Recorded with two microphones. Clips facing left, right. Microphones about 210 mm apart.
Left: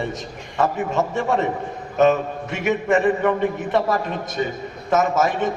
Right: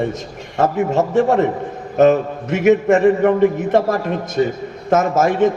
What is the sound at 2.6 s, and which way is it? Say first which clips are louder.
A man's voice: right 7 dB; 45° right (ahead or behind).